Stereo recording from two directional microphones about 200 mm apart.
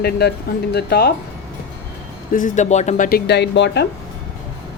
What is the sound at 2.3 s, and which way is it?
Speech, 40° left (ahead or behind).